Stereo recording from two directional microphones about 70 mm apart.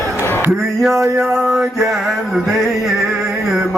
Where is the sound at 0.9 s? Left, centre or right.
Right.